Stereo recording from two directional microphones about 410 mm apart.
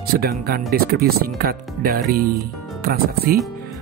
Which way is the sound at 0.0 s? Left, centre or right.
Right.